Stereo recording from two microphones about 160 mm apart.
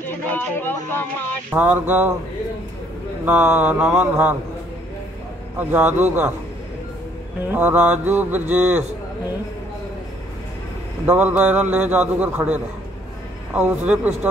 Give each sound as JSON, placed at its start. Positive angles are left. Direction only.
{"t": 0.0, "sound": "speech", "side_deg": 10}
{"t": 1.5, "sound": "speech", "side_deg": -10}
{"t": 3.3, "sound": "speech", "side_deg": -10}
{"t": 5.6, "sound": "speech", "side_deg": -10}
{"t": 7.4, "sound": "speech", "side_deg": -10}
{"t": 11.1, "sound": "speech", "side_deg": -10}